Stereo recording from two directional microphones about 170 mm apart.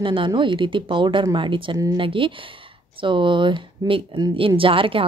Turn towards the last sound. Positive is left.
turn(degrees=-30)  # may be behind; listen again after turning